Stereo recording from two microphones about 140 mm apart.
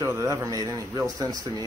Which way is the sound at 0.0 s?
25° right (ahead or behind).